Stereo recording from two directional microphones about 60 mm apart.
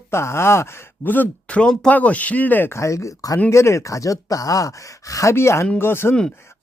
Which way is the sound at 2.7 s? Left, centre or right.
Left.